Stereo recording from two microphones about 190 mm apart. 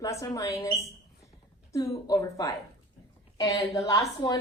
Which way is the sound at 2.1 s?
20° left (ahead or behind).